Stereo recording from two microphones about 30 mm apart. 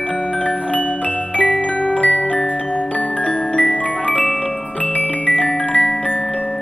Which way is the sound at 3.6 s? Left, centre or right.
Left.